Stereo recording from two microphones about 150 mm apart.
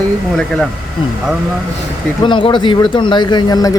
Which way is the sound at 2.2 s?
35° left (ahead or behind).